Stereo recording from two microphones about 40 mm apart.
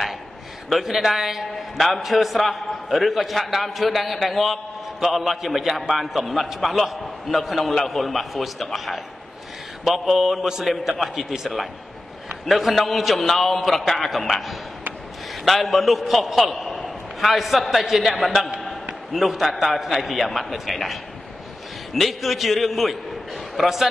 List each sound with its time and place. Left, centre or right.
0.7 s a man's voice: centre